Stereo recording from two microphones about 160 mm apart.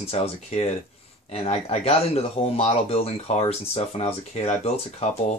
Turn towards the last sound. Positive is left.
turn(degrees=40)  # may be behind; listen again after turning